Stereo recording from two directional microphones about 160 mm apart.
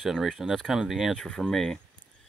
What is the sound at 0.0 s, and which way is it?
Speech, centre (ahead or behind).